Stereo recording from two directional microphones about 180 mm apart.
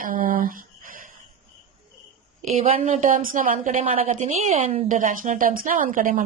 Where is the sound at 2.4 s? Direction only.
35° right (ahead or behind).